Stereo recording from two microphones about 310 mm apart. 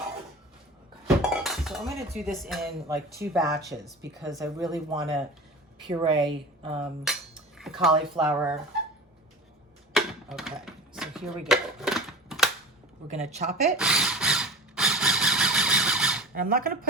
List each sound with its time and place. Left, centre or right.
1.0 s speech: centre
4.2 s speech: centre
7.0 s cutlery: centre
8.2 s speech: centre
9.9 s a sound: centre
13.1 s speech: right
13.7 s squeal: centre
16.3 s speech: right